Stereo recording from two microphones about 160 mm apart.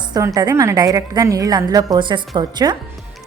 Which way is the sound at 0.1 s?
20° right (ahead or behind).